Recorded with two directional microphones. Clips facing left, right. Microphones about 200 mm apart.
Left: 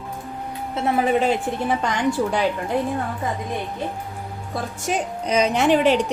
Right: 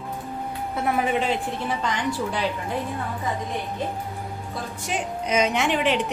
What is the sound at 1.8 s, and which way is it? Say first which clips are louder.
Speech: left 5 dB; 45° left (ahead or behind).